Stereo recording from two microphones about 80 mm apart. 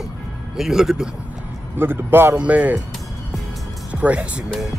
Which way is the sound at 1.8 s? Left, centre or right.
Right.